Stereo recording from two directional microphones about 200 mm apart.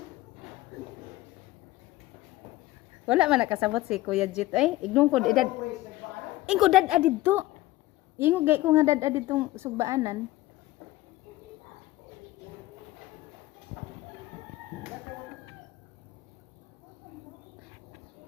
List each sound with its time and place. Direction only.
3.1 s a woman's voice: 5° right (ahead or behind)